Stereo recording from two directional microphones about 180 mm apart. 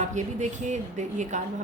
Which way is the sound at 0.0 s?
40° right (ahead or behind).